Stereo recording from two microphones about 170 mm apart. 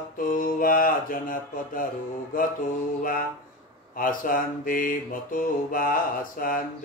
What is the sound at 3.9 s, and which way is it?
Mantra, 55° left (ahead or behind).